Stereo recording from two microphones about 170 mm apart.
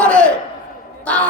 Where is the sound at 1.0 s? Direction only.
5° left (ahead or behind).